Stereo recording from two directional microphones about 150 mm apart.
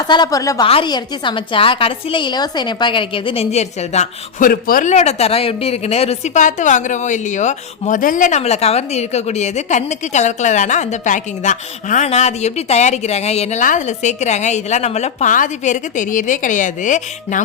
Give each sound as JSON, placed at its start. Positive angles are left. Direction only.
{"t": 0.1, "sound": "speech", "side_deg": 25}
{"t": 0.6, "sound": "a woman's voice", "side_deg": 35}